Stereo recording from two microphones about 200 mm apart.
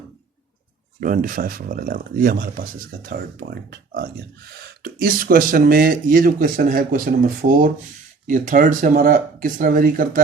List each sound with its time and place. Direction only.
0.9 s speech: 45° right (ahead or behind)